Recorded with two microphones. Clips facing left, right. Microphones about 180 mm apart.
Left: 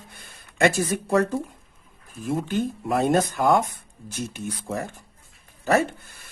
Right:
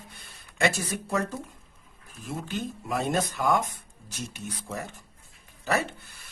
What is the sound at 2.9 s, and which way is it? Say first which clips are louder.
Speech: left 6 dB; 50° left (ahead or behind).